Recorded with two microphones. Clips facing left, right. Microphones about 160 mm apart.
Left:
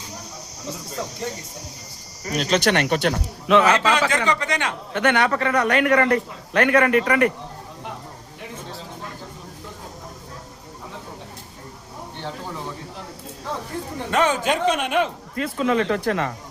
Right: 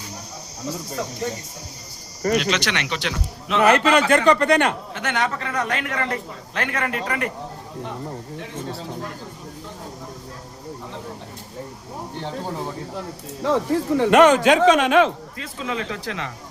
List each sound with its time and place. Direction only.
2.4 s speech: 45° left (ahead or behind)
3.6 s a man's voice: 60° right (ahead or behind)
4.9 s a man's voice: 60° left (ahead or behind)
13.4 s speech: 90° right
15.4 s speech: 55° left (ahead or behind)